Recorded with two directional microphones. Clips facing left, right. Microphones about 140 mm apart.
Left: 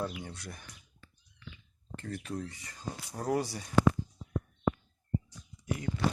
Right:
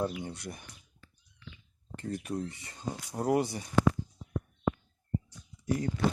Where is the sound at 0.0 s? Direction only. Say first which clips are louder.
Right 4 dB; 20° right (ahead or behind).